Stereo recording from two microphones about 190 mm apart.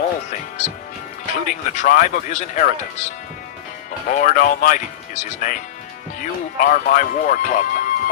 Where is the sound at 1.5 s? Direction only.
40° left (ahead or behind).